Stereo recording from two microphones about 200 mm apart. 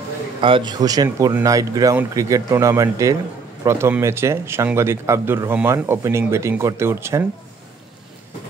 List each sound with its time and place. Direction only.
0.4 s speech: 25° right (ahead or behind)